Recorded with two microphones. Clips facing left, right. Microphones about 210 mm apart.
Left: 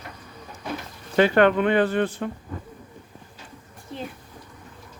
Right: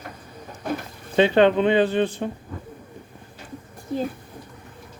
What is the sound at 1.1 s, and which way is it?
Speech, 20° right (ahead or behind).